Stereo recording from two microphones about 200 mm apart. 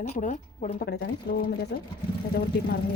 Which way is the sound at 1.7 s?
55° left (ahead or behind).